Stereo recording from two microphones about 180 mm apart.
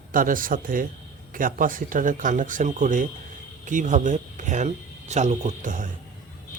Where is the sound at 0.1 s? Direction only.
50° right (ahead or behind).